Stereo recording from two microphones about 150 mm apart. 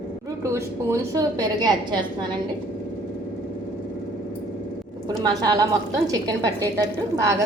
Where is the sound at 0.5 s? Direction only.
20° right (ahead or behind).